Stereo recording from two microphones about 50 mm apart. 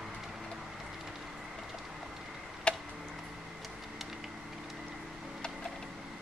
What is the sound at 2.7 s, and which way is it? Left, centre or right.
Tick-tock, left.